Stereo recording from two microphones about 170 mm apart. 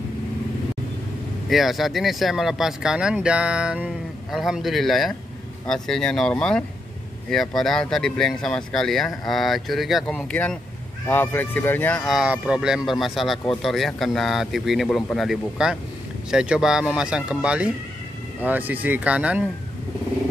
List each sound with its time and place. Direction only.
1.5 s speech: centre (ahead or behind)
12.1 s speech: 5° right (ahead or behind)